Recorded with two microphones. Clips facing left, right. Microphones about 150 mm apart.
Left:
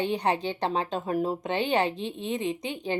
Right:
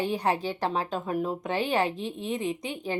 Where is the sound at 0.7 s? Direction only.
30° left (ahead or behind).